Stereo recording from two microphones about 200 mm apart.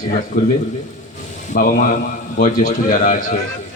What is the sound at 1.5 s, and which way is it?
Speech, 40° left (ahead or behind).